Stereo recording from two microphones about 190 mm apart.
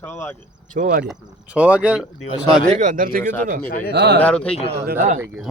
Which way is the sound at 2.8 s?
45° right (ahead or behind).